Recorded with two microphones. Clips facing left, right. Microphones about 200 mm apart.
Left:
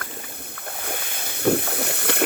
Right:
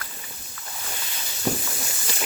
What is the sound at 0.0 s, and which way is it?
Boat, 60° left (ahead or behind).